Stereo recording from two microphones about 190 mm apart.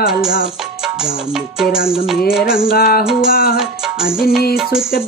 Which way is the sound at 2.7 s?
50° left (ahead or behind).